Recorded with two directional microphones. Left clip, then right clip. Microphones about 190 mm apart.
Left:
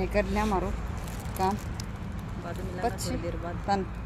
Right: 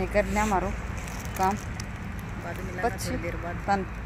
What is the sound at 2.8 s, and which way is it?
Speech, 10° right (ahead or behind).